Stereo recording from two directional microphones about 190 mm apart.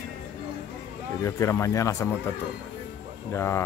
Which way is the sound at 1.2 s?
15° left (ahead or behind).